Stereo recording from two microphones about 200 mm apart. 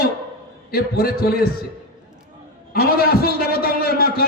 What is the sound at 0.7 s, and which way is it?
Speech, 50° left (ahead or behind).